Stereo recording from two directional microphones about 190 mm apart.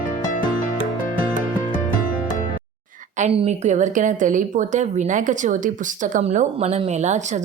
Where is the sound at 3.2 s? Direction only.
35° right (ahead or behind).